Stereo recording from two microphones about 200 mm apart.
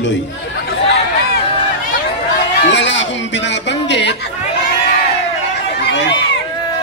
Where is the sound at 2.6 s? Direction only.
65° left (ahead or behind).